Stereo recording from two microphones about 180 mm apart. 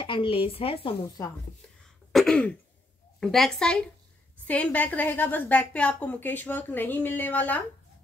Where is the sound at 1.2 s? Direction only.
15° left (ahead or behind).